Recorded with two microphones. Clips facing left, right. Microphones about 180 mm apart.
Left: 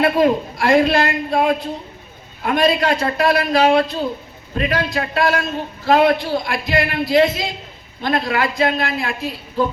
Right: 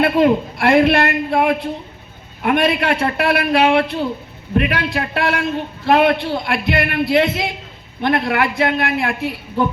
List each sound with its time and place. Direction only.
0.0 s a man's voice: 65° right (ahead or behind)